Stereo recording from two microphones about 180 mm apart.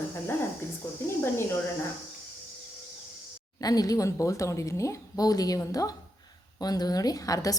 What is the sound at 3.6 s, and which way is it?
Speech, 20° left (ahead or behind).